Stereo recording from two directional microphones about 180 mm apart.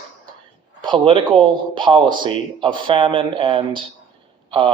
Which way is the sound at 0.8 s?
25° right (ahead or behind).